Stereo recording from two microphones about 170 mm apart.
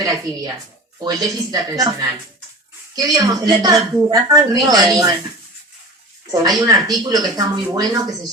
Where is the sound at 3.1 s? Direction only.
25° right (ahead or behind).